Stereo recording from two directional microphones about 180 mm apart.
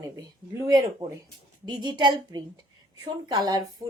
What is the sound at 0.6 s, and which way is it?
A woman's voice, 20° right (ahead or behind).